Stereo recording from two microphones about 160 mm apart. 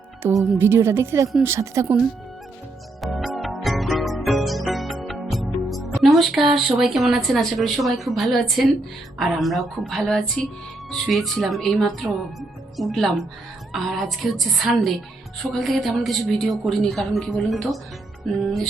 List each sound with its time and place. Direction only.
0.2 s speech: 15° right (ahead or behind)
3.0 s music: centre (ahead or behind)
9.1 s speech: centre (ahead or behind)